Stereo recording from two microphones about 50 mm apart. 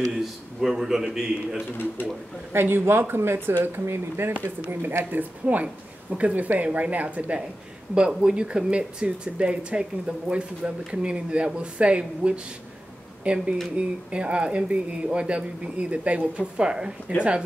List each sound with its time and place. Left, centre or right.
0.2 s a man's voice: centre
2.5 s a woman's voice: right
7.9 s speech: centre